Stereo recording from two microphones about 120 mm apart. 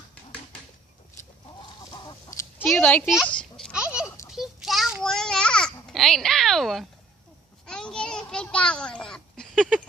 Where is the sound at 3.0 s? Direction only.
5° right (ahead or behind).